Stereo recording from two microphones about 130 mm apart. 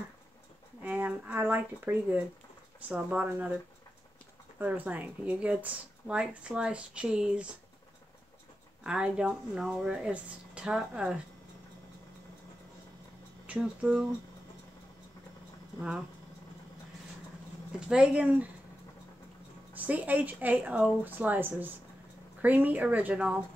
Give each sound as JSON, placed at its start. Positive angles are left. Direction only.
{"t": 0.8, "sound": "speech", "side_deg": -10}
{"t": 4.6, "sound": "speech", "side_deg": -15}
{"t": 8.8, "sound": "speech", "side_deg": -5}
{"t": 13.5, "sound": "speech", "side_deg": -10}
{"t": 17.7, "sound": "speech", "side_deg": -5}
{"t": 19.7, "sound": "speech", "side_deg": -10}